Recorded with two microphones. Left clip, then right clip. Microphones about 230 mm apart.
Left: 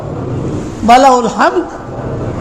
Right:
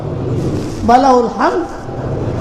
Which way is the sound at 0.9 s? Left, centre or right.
Left.